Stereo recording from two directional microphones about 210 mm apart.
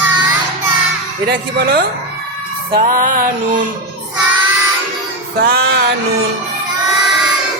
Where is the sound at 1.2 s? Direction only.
50° right (ahead or behind).